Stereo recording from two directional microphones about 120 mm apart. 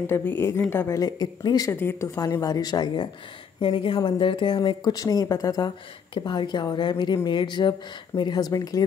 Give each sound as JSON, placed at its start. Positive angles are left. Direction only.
{"t": 0.0, "sound": "a woman's voice", "side_deg": 15}
{"t": 1.7, "sound": "a woman's voice", "side_deg": 20}
{"t": 2.1, "sound": "speech", "side_deg": 30}
{"t": 3.6, "sound": "speech", "side_deg": 45}